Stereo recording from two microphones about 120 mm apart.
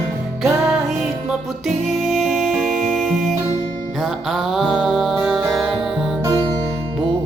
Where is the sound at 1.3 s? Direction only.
Centre (ahead or behind).